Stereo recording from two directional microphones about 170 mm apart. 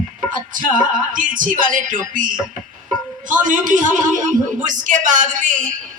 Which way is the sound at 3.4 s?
50° right (ahead or behind).